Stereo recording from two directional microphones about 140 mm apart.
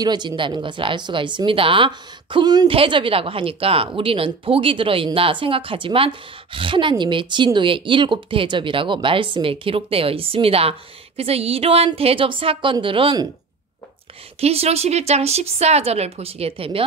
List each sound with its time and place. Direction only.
0.0 s speech: 30° right (ahead or behind)
14.4 s speech: 45° right (ahead or behind)